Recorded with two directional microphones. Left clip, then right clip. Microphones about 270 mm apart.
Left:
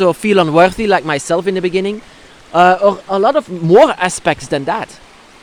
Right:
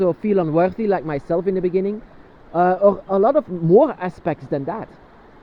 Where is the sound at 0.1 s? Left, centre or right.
Left.